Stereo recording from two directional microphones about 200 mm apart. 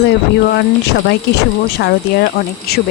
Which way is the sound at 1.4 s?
55° left (ahead or behind).